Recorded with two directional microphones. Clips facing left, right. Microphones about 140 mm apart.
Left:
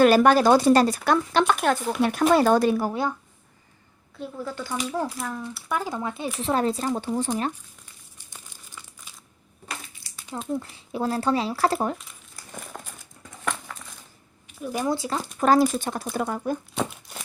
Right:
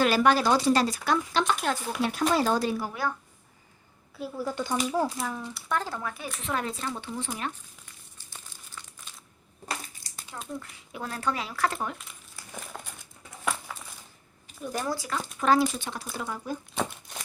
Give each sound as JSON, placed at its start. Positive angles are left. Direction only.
{"t": 0.0, "sound": "speech", "side_deg": 50}
{"t": 4.2, "sound": "speech", "side_deg": -10}
{"t": 5.4, "sound": "speech", "side_deg": 10}
{"t": 6.4, "sound": "speech", "side_deg": 35}
{"t": 9.6, "sound": "crushing", "side_deg": -40}
{"t": 10.5, "sound": "speech", "side_deg": 30}
{"t": 12.5, "sound": "crumpling", "side_deg": 0}
{"t": 14.6, "sound": "speech", "side_deg": 10}
{"t": 14.8, "sound": "speech", "side_deg": 25}
{"t": 15.4, "sound": "speech", "side_deg": 45}
{"t": 16.8, "sound": "a sound", "side_deg": 5}